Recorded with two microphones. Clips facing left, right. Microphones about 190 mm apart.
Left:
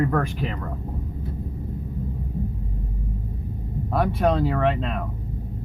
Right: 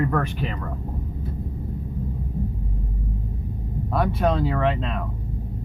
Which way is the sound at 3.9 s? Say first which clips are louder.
Left 1 dB; 55° left (ahead or behind).